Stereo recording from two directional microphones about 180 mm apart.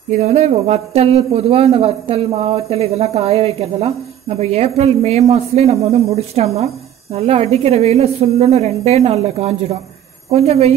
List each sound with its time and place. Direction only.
0.2 s a man's voice: 35° right (ahead or behind)